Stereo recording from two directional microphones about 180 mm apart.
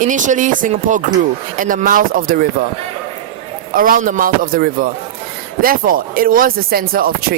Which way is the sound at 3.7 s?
50° right (ahead or behind).